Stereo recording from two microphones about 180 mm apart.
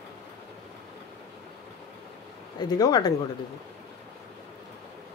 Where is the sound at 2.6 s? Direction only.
20° left (ahead or behind).